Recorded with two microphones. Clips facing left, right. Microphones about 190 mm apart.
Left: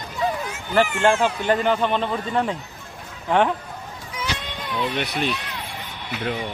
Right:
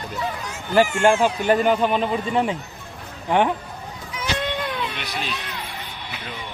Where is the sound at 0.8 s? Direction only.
15° right (ahead or behind).